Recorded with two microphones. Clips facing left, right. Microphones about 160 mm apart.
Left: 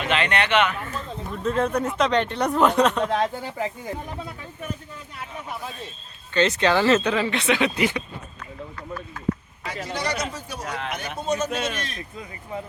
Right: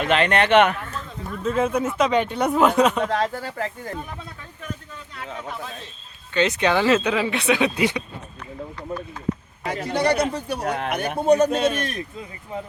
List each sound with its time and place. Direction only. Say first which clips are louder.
0.0 s speech: right 4 dB; 45° right (ahead or behind)
0.8 s speech: left 1 dB; centre (ahead or behind)
3.1 s speech: even; 15° left (ahead or behind)
6.3 s speech: even; 15° right (ahead or behind)
9.6 s speech: right 7 dB; 55° right (ahead or behind)